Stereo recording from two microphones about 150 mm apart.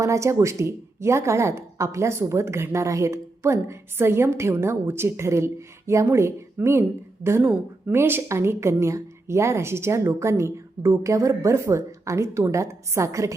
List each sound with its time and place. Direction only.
0.0 s a woman's voice: 20° right (ahead or behind)